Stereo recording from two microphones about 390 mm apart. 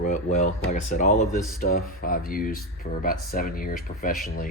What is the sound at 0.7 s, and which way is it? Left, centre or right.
Speech, centre.